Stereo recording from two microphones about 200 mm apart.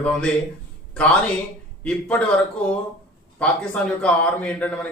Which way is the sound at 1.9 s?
5° left (ahead or behind).